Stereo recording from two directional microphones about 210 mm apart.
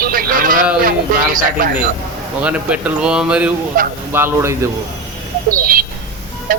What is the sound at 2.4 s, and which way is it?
Speech, 5° right (ahead or behind).